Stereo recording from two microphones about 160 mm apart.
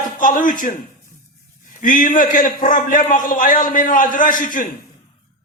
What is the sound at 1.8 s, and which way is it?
A man's voice, 60° left (ahead or behind).